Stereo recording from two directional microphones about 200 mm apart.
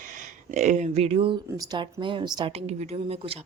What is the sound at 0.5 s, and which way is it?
Speech, 35° right (ahead or behind).